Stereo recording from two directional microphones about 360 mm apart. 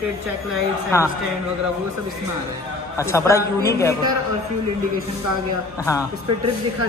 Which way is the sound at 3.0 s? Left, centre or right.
Centre.